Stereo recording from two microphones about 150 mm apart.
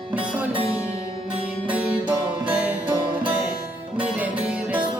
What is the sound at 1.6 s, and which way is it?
Music, 10° right (ahead or behind).